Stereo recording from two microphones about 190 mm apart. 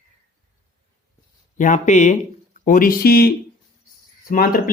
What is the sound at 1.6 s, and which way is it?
Speech, 40° left (ahead or behind).